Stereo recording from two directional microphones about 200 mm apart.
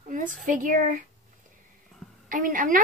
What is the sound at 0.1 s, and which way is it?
Speech, 40° right (ahead or behind).